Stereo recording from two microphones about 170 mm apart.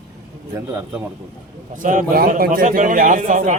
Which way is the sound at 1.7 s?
50° right (ahead or behind).